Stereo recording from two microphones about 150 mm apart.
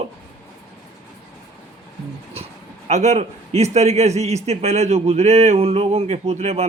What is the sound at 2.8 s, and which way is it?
Speech, 50° right (ahead or behind).